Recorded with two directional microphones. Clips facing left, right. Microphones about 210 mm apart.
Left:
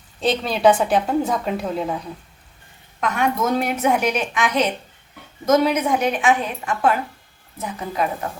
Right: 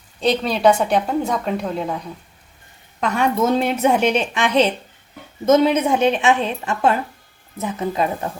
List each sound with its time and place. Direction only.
0.2 s a woman's voice: centre (ahead or behind)
3.0 s a woman's voice: 30° right (ahead or behind)